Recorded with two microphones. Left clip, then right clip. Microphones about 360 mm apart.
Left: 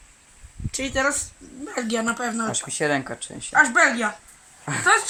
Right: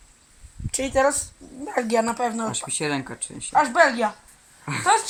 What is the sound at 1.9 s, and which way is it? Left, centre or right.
Speech, centre.